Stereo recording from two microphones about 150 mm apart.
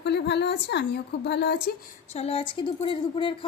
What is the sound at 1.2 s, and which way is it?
Speech, 90° left.